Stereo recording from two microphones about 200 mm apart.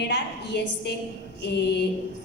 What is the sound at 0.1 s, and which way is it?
A woman's voice, 60° left (ahead or behind).